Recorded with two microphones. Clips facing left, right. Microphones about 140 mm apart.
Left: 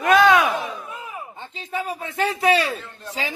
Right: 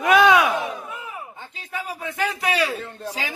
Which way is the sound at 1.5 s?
25° left (ahead or behind).